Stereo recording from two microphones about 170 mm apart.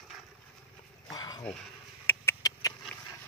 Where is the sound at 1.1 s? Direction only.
25° left (ahead or behind).